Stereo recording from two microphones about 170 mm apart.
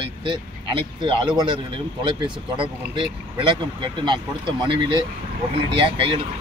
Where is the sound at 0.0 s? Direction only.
30° right (ahead or behind).